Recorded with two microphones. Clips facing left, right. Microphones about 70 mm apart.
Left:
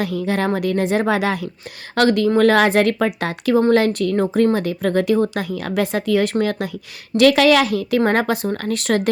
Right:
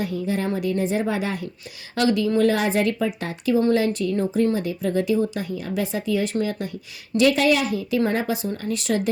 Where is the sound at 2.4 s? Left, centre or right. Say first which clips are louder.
Left 8 dB; left.